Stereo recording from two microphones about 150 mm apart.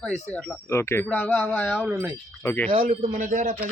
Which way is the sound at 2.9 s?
50° right (ahead or behind).